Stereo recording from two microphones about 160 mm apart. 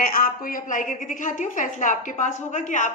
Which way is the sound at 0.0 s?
55° left (ahead or behind).